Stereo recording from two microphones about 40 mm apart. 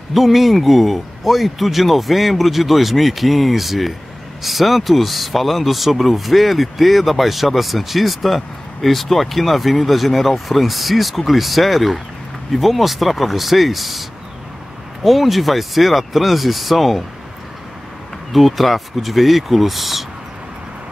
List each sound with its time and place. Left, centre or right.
0.1 s speech: centre
15.0 s speech: centre
18.3 s speech: centre